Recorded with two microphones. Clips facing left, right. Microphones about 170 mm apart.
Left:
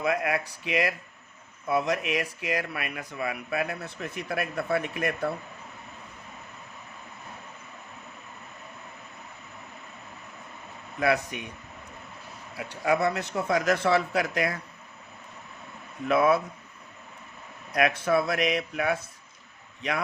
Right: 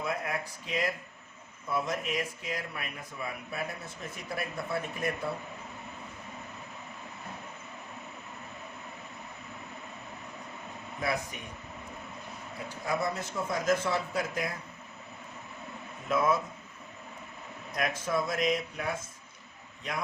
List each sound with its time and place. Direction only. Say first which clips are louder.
0.0 s speech: left 7 dB; 80° left
11.0 s speech: left 7 dB; 70° left (ahead or behind)
12.5 s speech: left 7 dB; 75° left (ahead or behind)
16.0 s speech: left 5 dB; 70° left (ahead or behind)
17.7 s speech: left 7 dB; 70° left (ahead or behind)